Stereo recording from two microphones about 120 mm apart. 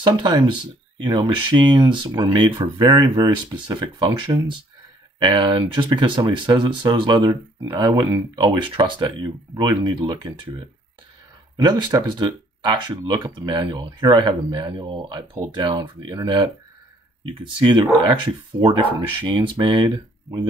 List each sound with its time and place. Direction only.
0.1 s speech: 40° right (ahead or behind)
2.9 s speech: 30° right (ahead or behind)
8.6 s speech: 45° right (ahead or behind)
11.5 s speech: 35° right (ahead or behind)